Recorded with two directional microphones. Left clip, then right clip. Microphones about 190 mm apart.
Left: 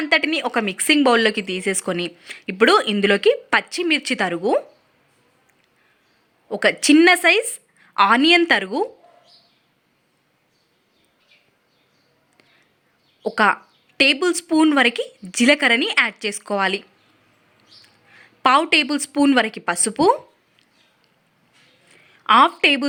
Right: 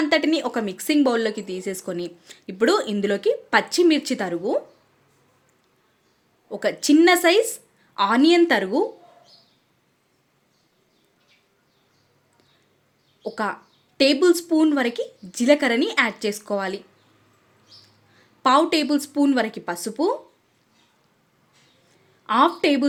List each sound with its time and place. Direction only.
0.0 s speech: 10° left (ahead or behind)
6.5 s speech: 10° left (ahead or behind)
13.2 s speech: 15° left (ahead or behind)
18.4 s speech: 15° left (ahead or behind)
22.3 s speech: 20° left (ahead or behind)